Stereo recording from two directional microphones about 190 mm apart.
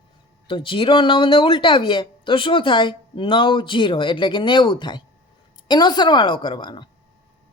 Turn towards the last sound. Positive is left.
turn(degrees=25)  # may be behind; listen again after turning